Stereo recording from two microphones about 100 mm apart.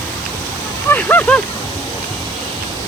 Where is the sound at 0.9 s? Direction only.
20° left (ahead or behind).